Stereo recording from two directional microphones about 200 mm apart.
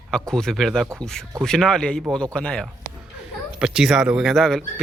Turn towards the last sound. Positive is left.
turn(degrees=0)  # may be behind; listen again after turning